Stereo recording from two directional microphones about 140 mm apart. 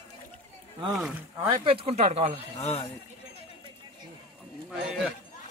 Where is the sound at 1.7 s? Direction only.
45° right (ahead or behind).